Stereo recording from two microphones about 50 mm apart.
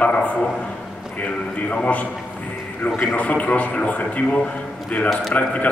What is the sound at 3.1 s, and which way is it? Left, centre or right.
Speech, left.